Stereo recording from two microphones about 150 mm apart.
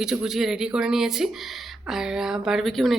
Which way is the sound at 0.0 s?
5° right (ahead or behind).